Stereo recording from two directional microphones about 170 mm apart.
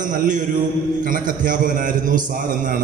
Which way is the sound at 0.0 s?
50° right (ahead or behind).